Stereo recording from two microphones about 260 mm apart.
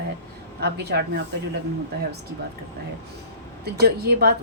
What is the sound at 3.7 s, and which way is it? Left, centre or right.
Speech, right.